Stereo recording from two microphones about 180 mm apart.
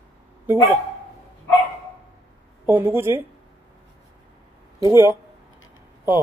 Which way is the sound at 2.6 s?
10° right (ahead or behind).